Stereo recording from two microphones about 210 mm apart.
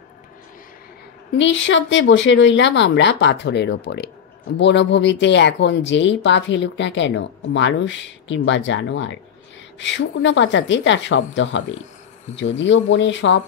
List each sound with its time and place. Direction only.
1.4 s speech: 60° left (ahead or behind)